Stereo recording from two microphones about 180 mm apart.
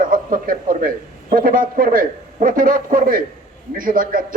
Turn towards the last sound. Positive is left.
turn(degrees=-50)  # may be behind; listen again after turning